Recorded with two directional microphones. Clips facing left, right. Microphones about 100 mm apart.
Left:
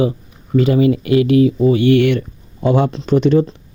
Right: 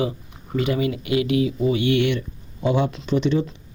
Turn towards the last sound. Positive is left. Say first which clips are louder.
# left 8 dB
turn(degrees=45)  # may be behind; listen again after turning